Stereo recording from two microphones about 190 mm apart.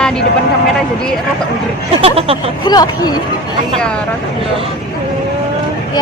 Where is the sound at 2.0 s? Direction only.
30° right (ahead or behind).